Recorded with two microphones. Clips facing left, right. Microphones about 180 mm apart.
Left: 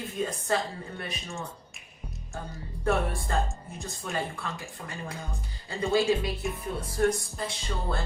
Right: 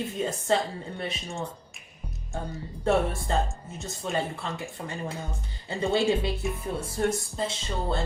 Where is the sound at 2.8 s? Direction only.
25° right (ahead or behind).